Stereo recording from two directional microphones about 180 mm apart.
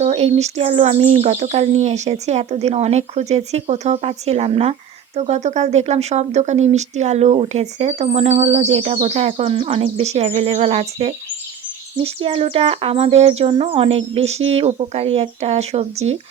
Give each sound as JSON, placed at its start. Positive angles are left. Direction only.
{"t": 0.0, "sound": "speech", "side_deg": -35}